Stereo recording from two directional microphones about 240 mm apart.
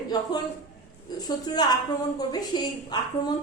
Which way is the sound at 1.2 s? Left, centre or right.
Centre.